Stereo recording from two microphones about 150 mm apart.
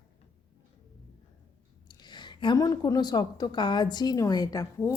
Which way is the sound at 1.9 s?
30° left (ahead or behind).